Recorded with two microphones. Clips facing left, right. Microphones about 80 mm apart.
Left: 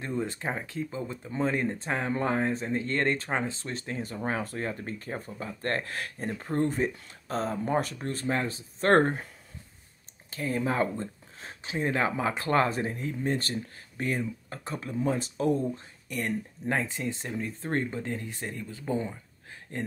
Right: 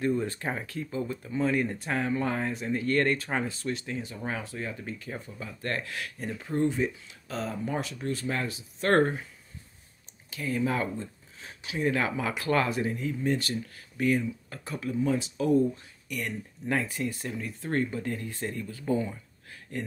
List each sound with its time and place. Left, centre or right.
0.0 s speech: left
10.3 s speech: left
16.7 s speech: left